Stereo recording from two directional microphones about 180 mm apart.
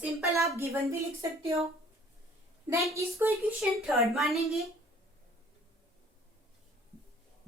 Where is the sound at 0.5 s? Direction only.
15° right (ahead or behind).